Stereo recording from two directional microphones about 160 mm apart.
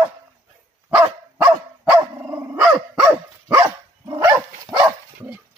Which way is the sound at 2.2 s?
10° right (ahead or behind).